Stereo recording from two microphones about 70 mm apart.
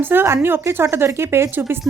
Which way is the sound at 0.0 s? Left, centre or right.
Right.